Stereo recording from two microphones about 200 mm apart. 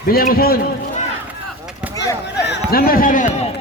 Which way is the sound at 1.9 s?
20° left (ahead or behind).